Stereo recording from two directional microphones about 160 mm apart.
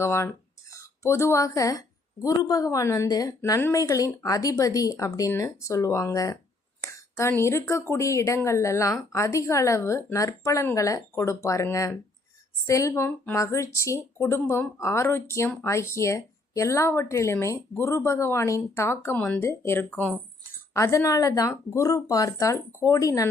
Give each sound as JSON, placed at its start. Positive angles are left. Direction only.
{"t": 0.0, "sound": "speech", "side_deg": 15}